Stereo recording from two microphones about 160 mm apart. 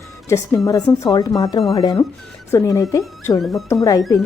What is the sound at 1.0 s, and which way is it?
Speech, 25° left (ahead or behind).